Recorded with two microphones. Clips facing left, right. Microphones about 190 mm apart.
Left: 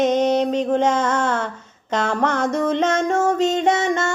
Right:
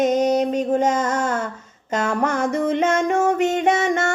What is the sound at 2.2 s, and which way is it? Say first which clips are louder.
Music: left 1 dB; 50° right (ahead or behind).